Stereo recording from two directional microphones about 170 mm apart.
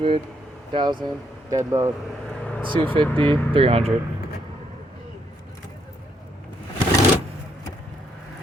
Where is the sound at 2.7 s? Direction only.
30° right (ahead or behind).